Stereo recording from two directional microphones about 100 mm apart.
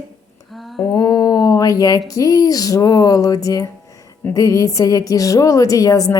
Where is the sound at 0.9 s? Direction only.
35° left (ahead or behind).